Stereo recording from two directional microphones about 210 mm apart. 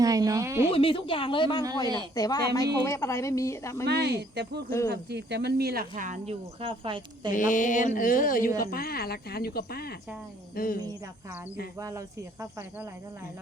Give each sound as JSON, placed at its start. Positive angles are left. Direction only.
{"t": 0.0, "sound": "speech", "side_deg": -15}
{"t": 0.7, "sound": "speech", "side_deg": 25}
{"t": 3.8, "sound": "speech", "side_deg": -50}
{"t": 7.3, "sound": "a woman's voice", "side_deg": 40}
{"t": 11.8, "sound": "speech", "side_deg": -15}